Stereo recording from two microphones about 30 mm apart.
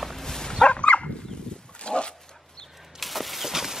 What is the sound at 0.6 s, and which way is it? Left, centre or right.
Dog, left.